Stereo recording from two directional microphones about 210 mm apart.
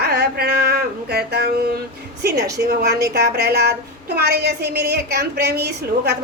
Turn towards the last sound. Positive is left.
turn(degrees=-50)  # may be behind; listen again after turning